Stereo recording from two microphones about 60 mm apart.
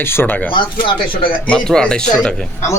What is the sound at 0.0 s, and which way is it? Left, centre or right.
Speech, left.